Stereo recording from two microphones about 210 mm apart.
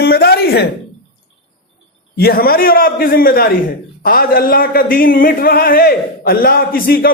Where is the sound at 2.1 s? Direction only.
45° left (ahead or behind).